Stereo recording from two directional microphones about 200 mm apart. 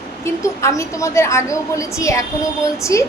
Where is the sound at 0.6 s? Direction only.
15° left (ahead or behind).